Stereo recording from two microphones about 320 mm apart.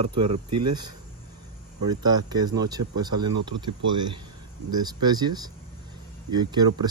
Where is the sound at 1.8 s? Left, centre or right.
Centre.